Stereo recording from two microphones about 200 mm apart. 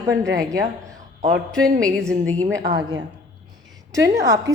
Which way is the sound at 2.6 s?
55° right (ahead or behind).